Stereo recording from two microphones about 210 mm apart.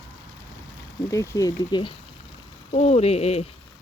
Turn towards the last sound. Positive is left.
turn(degrees=30)  # may be behind; listen again after turning